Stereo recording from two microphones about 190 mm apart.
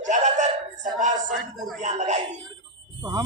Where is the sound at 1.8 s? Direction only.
40° right (ahead or behind).